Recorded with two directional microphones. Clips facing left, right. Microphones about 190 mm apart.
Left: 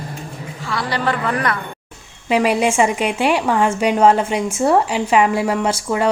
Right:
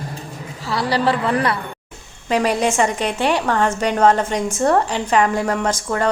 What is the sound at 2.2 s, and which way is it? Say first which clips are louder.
A woman's voice: left 2 dB; 10° left (ahead or behind).